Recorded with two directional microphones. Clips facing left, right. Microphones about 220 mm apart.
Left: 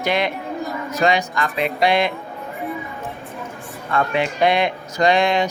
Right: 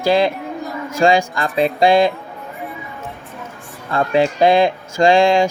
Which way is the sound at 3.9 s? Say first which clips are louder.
Right 5 dB; 30° right (ahead or behind).